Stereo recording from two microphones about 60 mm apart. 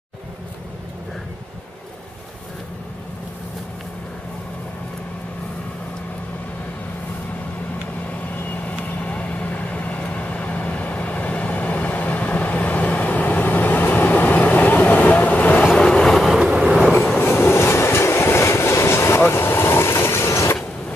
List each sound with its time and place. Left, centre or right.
8.4 s vehicle: left
15.7 s train: centre
16.3 s train: centre
17.2 s train: left